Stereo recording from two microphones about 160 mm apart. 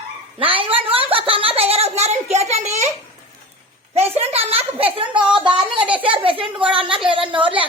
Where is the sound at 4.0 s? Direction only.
40° right (ahead or behind).